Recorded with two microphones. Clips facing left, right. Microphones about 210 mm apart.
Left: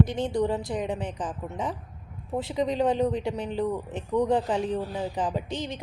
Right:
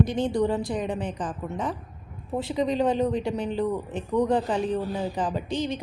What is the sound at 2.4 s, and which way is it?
A woman's voice, 15° left (ahead or behind).